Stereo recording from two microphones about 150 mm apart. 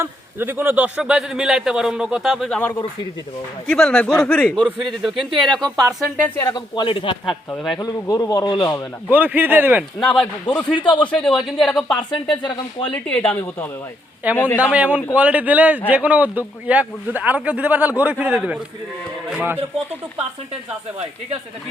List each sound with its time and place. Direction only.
0.0 s a man's voice: 15° right (ahead or behind)
3.7 s a man's voice: 5° left (ahead or behind)
5.6 s speech: 25° right (ahead or behind)
6.2 s speech: 15° left (ahead or behind)
6.5 s a man's voice: 35° left (ahead or behind)
7.5 s a man's voice: centre (ahead or behind)
7.8 s a man's voice: 25° left (ahead or behind)
9.0 s a man's voice: 10° right (ahead or behind)
10.0 s speech: 5° left (ahead or behind)
14.6 s a man's voice: 10° right (ahead or behind)